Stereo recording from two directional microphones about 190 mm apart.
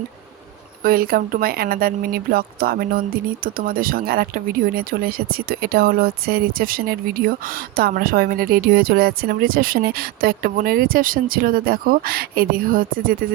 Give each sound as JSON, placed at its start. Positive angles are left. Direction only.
{"t": 0.8, "sound": "speech", "side_deg": -50}